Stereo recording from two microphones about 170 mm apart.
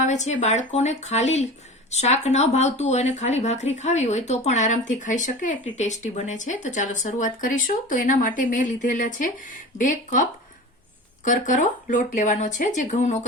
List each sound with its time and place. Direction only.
0.0 s speech: 45° left (ahead or behind)
11.3 s speech: 50° left (ahead or behind)